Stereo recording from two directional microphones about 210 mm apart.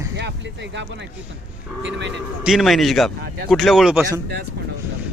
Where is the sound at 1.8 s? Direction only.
55° right (ahead or behind).